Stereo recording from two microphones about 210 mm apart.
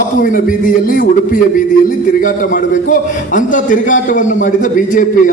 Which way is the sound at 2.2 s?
40° left (ahead or behind).